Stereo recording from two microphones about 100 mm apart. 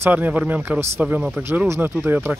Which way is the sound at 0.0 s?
15° right (ahead or behind).